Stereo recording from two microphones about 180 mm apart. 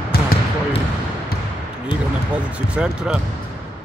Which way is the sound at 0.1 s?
60° left (ahead or behind).